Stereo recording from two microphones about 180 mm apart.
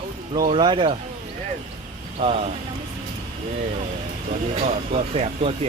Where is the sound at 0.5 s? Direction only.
25° right (ahead or behind).